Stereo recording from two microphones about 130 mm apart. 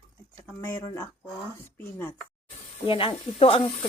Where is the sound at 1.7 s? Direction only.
15° left (ahead or behind).